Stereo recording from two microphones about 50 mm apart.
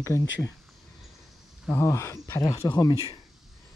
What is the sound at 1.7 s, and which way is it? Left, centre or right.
Speech, left.